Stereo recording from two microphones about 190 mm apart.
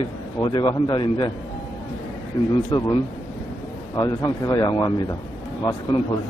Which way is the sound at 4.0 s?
20° left (ahead or behind).